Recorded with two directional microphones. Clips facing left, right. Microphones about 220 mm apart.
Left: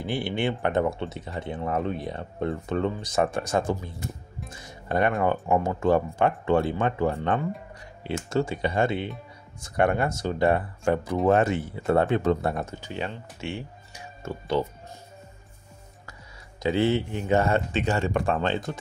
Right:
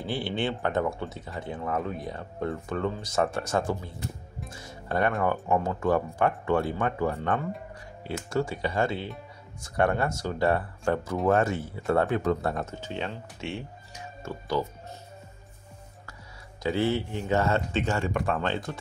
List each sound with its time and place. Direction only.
0.0 s speech: 15° left (ahead or behind)
14.2 s speech: 25° left (ahead or behind)
16.6 s speech: 20° left (ahead or behind)